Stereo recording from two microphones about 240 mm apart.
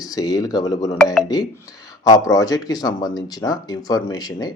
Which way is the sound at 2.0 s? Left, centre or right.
Centre.